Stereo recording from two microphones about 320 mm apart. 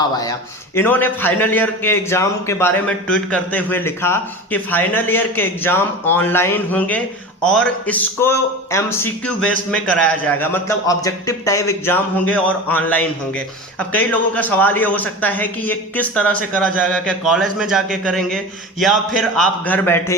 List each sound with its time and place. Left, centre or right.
0.8 s a man's voice: centre